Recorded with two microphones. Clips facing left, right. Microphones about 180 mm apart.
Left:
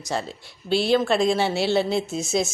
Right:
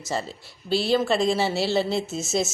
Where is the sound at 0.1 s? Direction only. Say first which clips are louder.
Left 1 dB; centre (ahead or behind).